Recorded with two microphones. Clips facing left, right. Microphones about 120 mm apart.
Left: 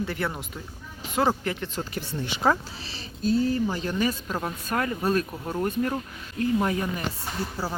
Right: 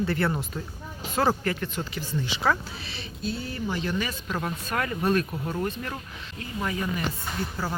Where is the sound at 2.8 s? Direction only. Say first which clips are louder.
Left 7 dB; 40° left (ahead or behind).